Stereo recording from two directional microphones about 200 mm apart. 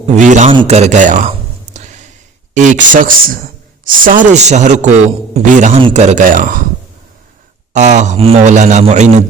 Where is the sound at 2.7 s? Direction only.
40° right (ahead or behind).